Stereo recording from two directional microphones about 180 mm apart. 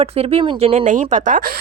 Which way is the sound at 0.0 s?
35° right (ahead or behind).